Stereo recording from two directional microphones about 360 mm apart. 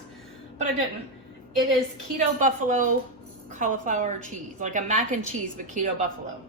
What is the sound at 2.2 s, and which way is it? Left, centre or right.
A woman's voice, right.